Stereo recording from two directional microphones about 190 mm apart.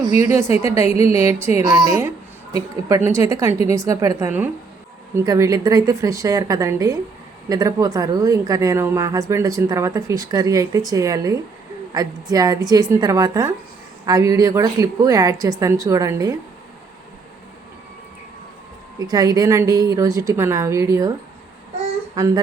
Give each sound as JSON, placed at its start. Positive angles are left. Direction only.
{"t": 0.3, "sound": "a woman's voice", "side_deg": -15}
{"t": 2.0, "sound": "a sound", "side_deg": -15}
{"t": 2.9, "sound": "a woman's voice", "side_deg": -15}
{"t": 18.9, "sound": "a woman's voice", "side_deg": -20}
{"t": 22.2, "sound": "a woman's voice", "side_deg": -20}